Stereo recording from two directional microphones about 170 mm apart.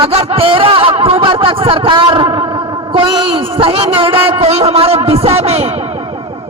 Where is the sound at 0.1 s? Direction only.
35° right (ahead or behind).